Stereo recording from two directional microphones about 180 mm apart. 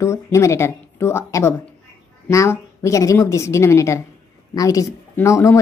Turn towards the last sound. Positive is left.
turn(degrees=15)  # may be behind; listen again after turning